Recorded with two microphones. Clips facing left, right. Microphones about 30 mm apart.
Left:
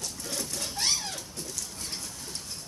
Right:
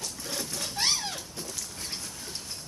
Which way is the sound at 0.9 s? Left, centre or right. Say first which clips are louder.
Right 1 dB; centre.